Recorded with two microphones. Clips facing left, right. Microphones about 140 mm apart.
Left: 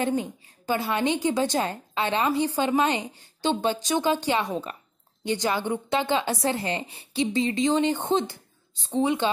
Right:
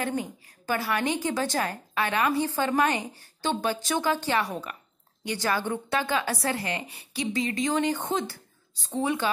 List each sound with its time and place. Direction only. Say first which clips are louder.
0.0 s a woman's voice: left 4 dB; 20° left (ahead or behind)